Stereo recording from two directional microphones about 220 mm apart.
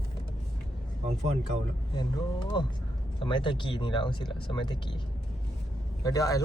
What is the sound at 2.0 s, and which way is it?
Speech, 20° left (ahead or behind).